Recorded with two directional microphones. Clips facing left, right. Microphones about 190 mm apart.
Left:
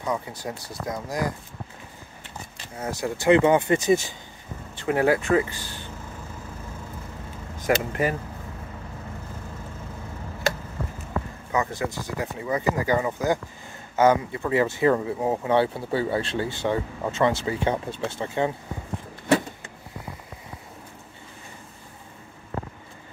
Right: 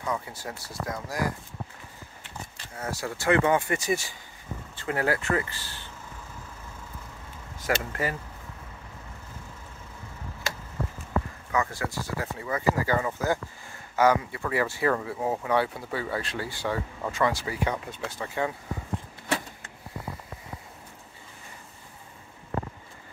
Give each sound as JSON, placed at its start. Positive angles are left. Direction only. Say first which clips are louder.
{"t": 0.0, "sound": "speech", "louder": "left 3 dB", "side_deg": 15}
{"t": 2.5, "sound": "speech", "louder": "left 3 dB", "side_deg": 20}
{"t": 7.5, "sound": "speech", "louder": "left 5 dB", "side_deg": 20}
{"t": 11.5, "sound": "speech", "louder": "left 2 dB", "side_deg": 20}